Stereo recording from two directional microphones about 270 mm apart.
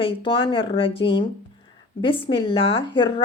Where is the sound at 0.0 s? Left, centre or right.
Centre.